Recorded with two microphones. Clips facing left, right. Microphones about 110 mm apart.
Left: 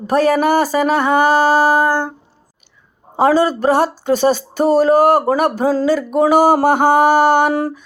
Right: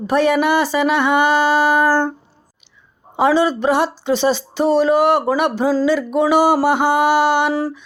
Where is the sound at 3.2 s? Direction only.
40° left (ahead or behind).